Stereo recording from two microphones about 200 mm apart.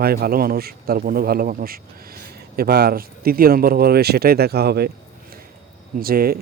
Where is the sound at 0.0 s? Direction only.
50° right (ahead or behind).